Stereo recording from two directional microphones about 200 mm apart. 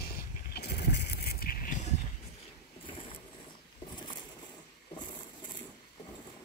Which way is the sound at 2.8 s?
25° left (ahead or behind).